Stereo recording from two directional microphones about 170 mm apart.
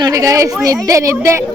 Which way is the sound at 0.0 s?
20° right (ahead or behind).